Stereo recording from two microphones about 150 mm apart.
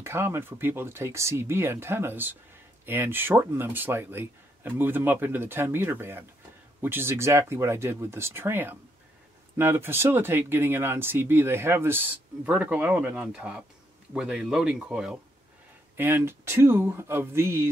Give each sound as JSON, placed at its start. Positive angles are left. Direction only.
{"t": 0.0, "sound": "speech", "side_deg": -15}